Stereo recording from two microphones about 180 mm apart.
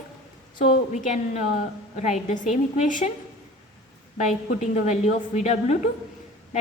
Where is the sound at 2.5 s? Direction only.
45° left (ahead or behind).